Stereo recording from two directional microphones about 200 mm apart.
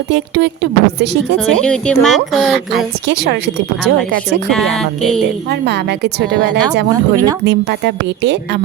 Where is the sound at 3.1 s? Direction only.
60° right (ahead or behind).